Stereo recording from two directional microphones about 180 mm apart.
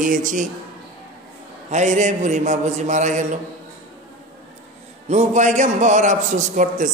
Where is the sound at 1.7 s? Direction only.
40° right (ahead or behind).